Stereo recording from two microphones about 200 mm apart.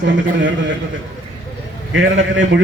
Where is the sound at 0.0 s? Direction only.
65° right (ahead or behind).